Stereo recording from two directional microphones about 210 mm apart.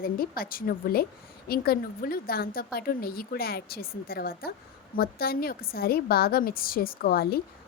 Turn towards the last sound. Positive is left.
turn(degrees=45)  # may be behind; listen again after turning